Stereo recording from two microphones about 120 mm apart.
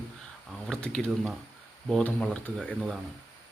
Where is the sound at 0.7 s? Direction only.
5° left (ahead or behind).